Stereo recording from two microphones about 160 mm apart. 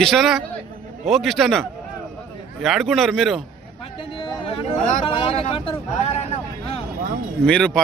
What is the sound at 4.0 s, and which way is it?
Speech, 35° left (ahead or behind).